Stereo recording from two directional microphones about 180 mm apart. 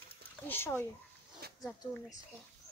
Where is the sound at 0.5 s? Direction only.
10° left (ahead or behind).